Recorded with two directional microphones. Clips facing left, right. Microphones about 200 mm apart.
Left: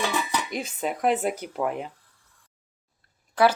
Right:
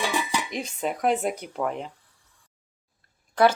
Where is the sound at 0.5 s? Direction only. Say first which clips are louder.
Even; centre (ahead or behind).